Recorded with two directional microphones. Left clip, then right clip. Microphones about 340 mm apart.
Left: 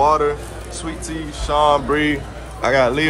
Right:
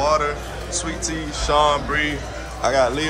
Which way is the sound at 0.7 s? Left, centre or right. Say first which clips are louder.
Right 2 dB; centre.